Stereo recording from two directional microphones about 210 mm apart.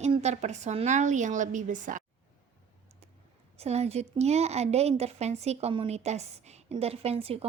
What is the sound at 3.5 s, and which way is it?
A woman's voice, 30° right (ahead or behind).